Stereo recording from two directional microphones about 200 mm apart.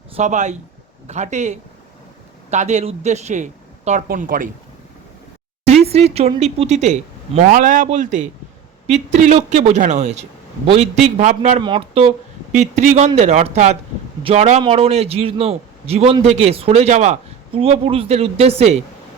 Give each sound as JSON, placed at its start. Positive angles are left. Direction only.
{"t": 0.2, "sound": "a man's voice", "side_deg": -35}
{"t": 5.6, "sound": "a man's voice", "side_deg": -30}